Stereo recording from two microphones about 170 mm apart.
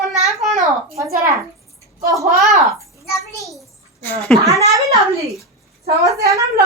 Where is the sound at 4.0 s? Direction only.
10° left (ahead or behind).